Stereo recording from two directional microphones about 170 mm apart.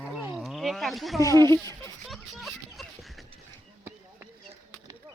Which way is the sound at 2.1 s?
Centre (ahead or behind).